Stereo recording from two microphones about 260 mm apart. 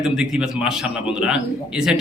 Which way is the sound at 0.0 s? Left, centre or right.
Centre.